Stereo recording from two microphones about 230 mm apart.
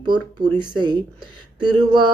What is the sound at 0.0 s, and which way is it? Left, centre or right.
Speech, centre.